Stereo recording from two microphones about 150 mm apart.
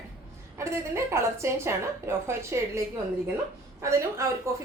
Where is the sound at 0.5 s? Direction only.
20° right (ahead or behind).